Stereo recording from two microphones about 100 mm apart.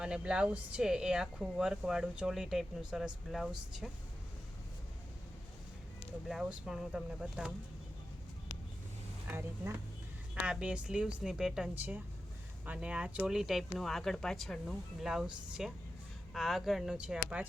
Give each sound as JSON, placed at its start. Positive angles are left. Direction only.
{"t": 0.0, "sound": "speech", "side_deg": -10}
{"t": 6.2, "sound": "speech", "side_deg": -5}
{"t": 9.2, "sound": "speech", "side_deg": -20}
{"t": 10.4, "sound": "speech", "side_deg": -10}